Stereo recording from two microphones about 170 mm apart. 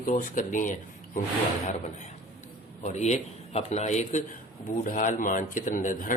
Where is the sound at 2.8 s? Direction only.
45° left (ahead or behind).